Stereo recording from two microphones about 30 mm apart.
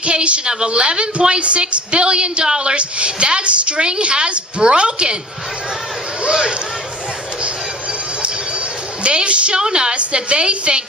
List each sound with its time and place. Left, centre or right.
0.0 s a woman's voice: right
6.2 s speech: right
9.0 s speech: right
9.6 s a woman's voice: right